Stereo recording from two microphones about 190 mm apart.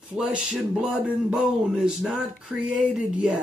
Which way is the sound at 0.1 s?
5° right (ahead or behind).